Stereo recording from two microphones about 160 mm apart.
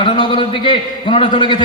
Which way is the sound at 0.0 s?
30° left (ahead or behind).